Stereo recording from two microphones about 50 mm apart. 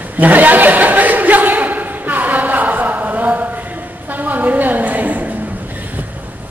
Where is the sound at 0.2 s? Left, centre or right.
Right.